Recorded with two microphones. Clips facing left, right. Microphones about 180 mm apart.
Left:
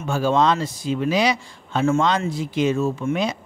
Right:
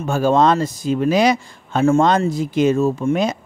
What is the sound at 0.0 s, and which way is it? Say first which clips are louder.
Speech: right 4 dB; 45° right (ahead or behind).